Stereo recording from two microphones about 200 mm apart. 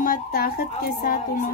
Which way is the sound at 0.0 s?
45° left (ahead or behind).